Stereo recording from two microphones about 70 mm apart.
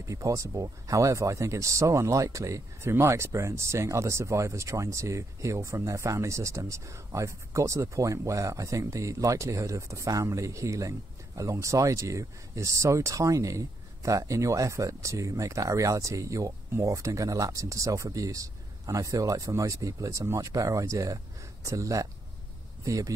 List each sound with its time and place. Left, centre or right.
0.0 s speech: right
2.9 s speech: right